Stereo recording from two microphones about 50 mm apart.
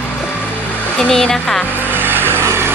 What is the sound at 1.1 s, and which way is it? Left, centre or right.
Speech, centre.